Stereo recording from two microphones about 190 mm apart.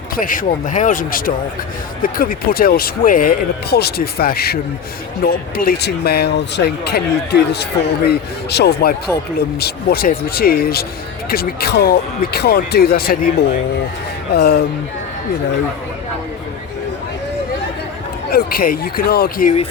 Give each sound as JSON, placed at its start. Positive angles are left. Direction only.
{"t": 0.2, "sound": "speech", "side_deg": 45}
{"t": 18.3, "sound": "speech", "side_deg": 50}